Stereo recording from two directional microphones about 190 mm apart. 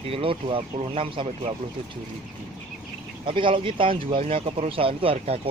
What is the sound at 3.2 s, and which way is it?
Speech, 25° right (ahead or behind).